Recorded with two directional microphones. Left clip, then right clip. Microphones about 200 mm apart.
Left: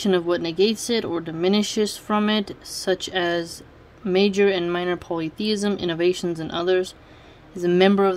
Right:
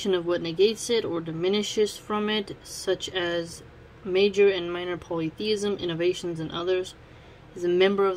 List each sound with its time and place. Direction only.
0.0 s speech: 45° left (ahead or behind)